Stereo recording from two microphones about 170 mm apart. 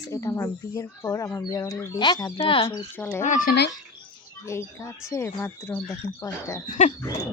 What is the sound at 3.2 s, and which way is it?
Speech, 50° left (ahead or behind).